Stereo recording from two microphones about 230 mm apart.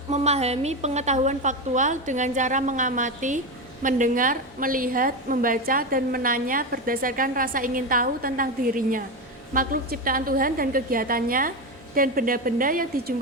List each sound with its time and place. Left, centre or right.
0.1 s a woman's voice: right